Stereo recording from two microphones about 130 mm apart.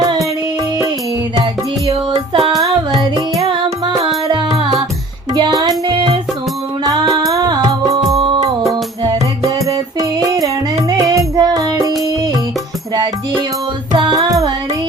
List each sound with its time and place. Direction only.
2.6 s music: 30° right (ahead or behind)
5.9 s music: 40° right (ahead or behind)
6.8 s music: 30° right (ahead or behind)
9.4 s music: 25° right (ahead or behind)
13.9 s music: 30° right (ahead or behind)